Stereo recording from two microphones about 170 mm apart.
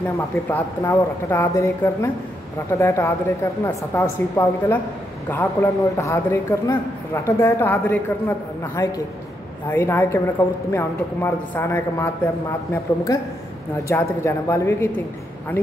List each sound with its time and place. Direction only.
0.5 s a woman's voice: 15° left (ahead or behind)